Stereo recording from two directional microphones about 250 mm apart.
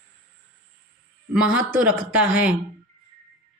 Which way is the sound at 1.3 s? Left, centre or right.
Centre.